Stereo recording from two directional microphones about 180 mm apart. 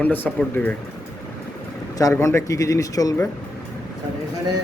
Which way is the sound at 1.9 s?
15° left (ahead or behind).